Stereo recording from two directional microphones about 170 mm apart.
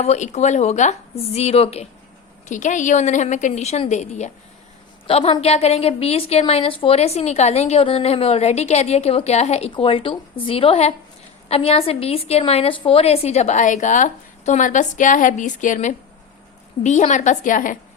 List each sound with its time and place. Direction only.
0.0 s a woman's voice: 40° left (ahead or behind)